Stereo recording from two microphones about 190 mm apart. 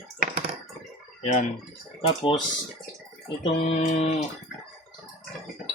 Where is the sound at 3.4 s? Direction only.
30° left (ahead or behind).